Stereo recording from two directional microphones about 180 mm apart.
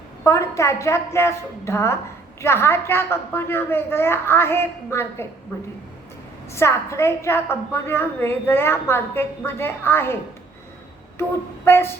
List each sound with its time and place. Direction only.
0.3 s a woman's voice: 15° left (ahead or behind)
6.5 s a woman's voice: 15° left (ahead or behind)
11.2 s a woman's voice: 15° left (ahead or behind)